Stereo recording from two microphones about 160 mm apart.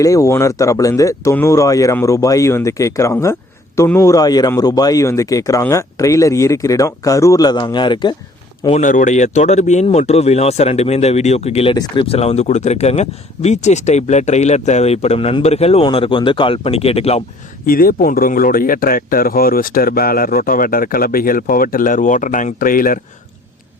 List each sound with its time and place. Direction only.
0.0 s speech: 20° left (ahead or behind)
8.7 s speech: 55° left (ahead or behind)
17.7 s speech: 65° left (ahead or behind)